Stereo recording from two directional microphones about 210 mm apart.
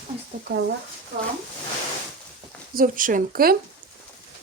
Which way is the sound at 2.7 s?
40° right (ahead or behind).